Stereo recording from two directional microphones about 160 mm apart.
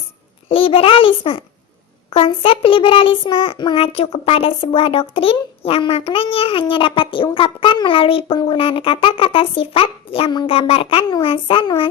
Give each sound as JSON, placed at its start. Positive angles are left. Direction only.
{"t": 0.4, "sound": "a child's voice", "side_deg": 35}